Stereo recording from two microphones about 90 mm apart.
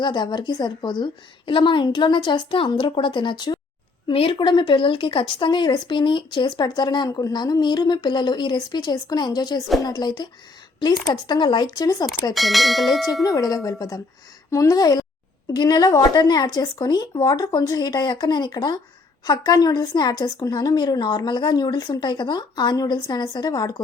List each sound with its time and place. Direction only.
0.0 s a woman's voice: 55° left (ahead or behind)
4.1 s a woman's voice: 80° left; by 6.5 s 65° left (ahead or behind)
6.6 s speech: 50° left (ahead or behind)
12.3 s speech: centre (ahead or behind)
13.2 s speech: 45° left (ahead or behind)